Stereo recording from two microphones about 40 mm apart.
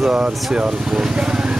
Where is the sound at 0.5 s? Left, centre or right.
Right.